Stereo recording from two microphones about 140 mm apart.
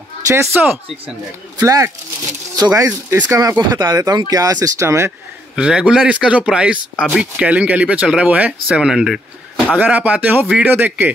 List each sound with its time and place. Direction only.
0.3 s speech: 15° right (ahead or behind)
5.6 s speech: 5° right (ahead or behind)